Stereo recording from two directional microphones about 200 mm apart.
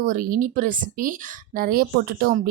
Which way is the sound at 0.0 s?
45° right (ahead or behind).